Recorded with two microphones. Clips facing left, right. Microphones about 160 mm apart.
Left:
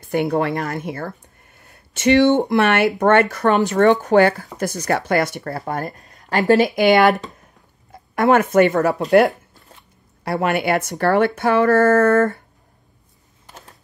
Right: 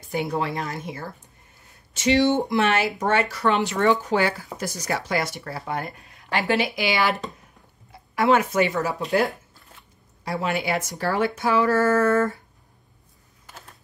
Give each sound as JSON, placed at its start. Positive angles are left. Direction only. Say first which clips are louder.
{"t": 0.0, "sound": "speech", "louder": "left 7 dB", "side_deg": 60}
{"t": 3.8, "sound": "speech", "louder": "left 8 dB", "side_deg": 60}
{"t": 10.2, "sound": "speech", "louder": "left 6 dB", "side_deg": 60}
{"t": 13.5, "sound": "a sound", "louder": "left 2 dB", "side_deg": 20}